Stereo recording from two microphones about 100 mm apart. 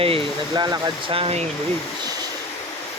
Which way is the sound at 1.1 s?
75° right (ahead or behind).